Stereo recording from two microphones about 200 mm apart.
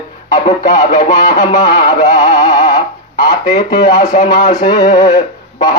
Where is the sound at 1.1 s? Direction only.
20° left (ahead or behind).